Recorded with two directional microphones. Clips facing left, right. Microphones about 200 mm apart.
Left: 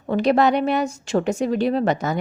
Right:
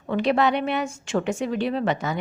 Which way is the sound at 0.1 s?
40° left (ahead or behind).